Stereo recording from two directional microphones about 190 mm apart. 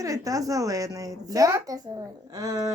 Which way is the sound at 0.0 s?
15° right (ahead or behind).